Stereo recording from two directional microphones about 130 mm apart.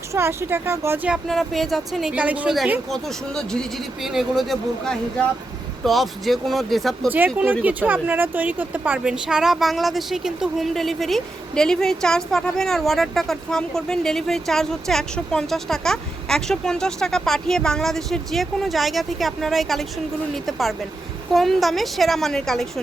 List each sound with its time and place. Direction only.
0.1 s speech: 20° right (ahead or behind)
1.1 s speech: centre (ahead or behind)
2.9 s speech: 5° left (ahead or behind)
7.6 s speech: 15° right (ahead or behind); by 22.6 s 5° left (ahead or behind)